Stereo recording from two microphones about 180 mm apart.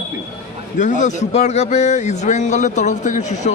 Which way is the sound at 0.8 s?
45° left (ahead or behind).